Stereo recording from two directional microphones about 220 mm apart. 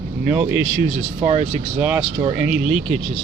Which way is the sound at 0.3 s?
5° right (ahead or behind).